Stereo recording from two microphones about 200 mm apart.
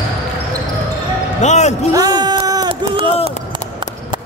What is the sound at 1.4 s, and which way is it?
Speech, 35° left (ahead or behind).